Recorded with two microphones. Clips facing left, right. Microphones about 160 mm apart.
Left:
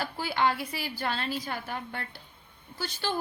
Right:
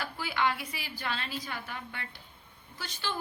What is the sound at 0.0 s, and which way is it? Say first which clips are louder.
Speech: left 3 dB; 30° left (ahead or behind).